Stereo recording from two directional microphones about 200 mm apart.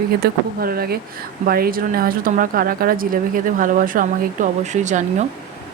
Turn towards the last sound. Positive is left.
turn(degrees=-35)  # may be behind; listen again after turning